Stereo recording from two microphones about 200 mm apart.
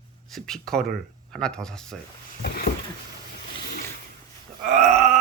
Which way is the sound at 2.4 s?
50° left (ahead or behind).